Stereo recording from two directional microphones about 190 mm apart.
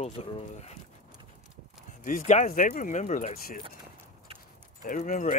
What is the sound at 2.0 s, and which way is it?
Speech, 40° left (ahead or behind).